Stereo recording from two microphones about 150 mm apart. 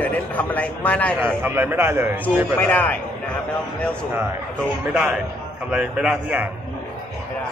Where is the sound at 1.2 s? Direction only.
15° right (ahead or behind).